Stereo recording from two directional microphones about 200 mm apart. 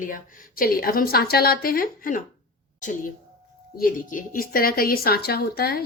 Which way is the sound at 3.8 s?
45° left (ahead or behind).